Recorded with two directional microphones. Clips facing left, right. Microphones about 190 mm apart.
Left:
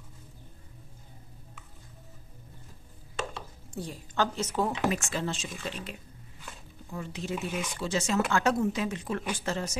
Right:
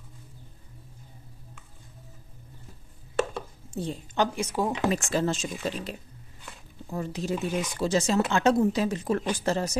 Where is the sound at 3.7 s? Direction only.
25° right (ahead or behind).